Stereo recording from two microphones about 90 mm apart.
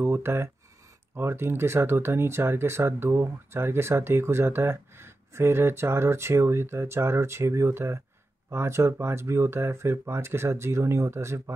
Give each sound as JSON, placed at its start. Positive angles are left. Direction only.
{"t": 0.0, "sound": "speech", "side_deg": -30}